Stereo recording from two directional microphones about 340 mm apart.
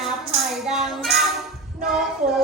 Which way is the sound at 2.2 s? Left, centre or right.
Right.